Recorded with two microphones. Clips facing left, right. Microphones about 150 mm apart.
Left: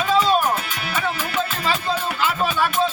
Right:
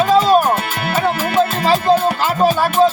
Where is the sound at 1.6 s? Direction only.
40° right (ahead or behind).